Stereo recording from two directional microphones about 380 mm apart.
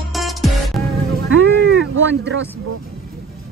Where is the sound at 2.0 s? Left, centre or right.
Right.